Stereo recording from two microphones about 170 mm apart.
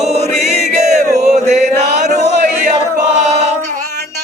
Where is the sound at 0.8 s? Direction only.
40° right (ahead or behind).